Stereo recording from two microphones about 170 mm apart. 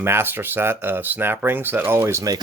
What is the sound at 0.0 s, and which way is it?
Speech, 15° right (ahead or behind).